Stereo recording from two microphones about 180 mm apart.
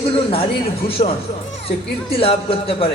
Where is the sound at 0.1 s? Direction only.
30° left (ahead or behind).